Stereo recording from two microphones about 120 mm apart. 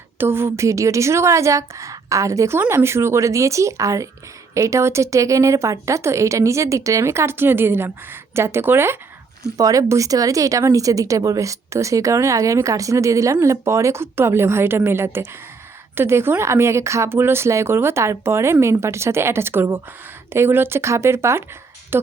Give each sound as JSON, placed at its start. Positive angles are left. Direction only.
{"t": 0.2, "sound": "a woman's voice", "side_deg": -20}
{"t": 9.6, "sound": "a woman's voice", "side_deg": -30}